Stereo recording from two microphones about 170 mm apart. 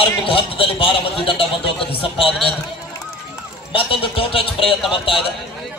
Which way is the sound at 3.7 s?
30° left (ahead or behind).